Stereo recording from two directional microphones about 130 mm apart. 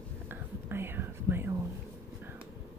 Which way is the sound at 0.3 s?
15° right (ahead or behind).